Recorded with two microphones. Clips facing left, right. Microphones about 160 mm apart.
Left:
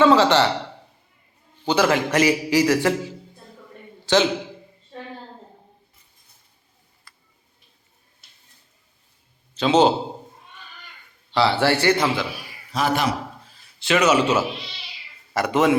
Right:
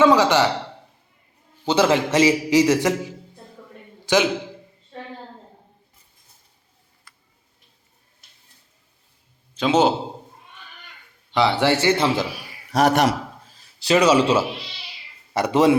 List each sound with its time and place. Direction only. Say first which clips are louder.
0.0 s a man's voice: even; 15° right (ahead or behind)
1.6 s a man's voice: right 1 dB; 25° right (ahead or behind)
9.6 s speech: left 1 dB; 10° right (ahead or behind)
11.3 s speech: even; 15° right (ahead or behind)
12.7 s a man's voice: right 5 dB; 65° right (ahead or behind)
13.5 s a man's voice: right 3 dB; 35° right (ahead or behind)